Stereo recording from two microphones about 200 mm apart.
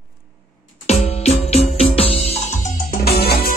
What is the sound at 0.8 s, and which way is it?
Music, 30° left (ahead or behind).